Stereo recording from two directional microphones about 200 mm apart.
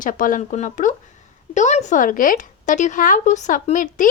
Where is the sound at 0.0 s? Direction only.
45° left (ahead or behind).